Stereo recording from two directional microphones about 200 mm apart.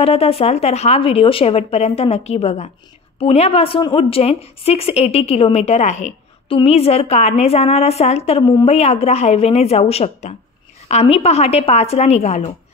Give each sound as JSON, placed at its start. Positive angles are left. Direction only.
{"t": 0.0, "sound": "a woman's voice", "side_deg": 30}